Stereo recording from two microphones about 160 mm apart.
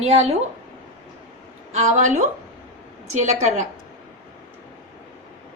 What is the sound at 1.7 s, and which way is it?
A woman's voice, 50° right (ahead or behind).